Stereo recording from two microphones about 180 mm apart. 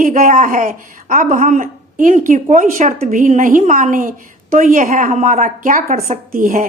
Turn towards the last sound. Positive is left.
turn(degrees=-50)  # may be behind; listen again after turning